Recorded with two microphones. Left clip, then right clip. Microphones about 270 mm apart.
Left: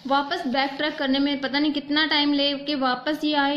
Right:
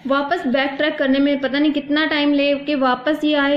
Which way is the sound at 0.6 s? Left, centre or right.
Left.